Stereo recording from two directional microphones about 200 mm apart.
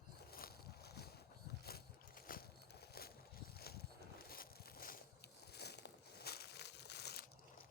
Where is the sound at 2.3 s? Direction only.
45° left (ahead or behind).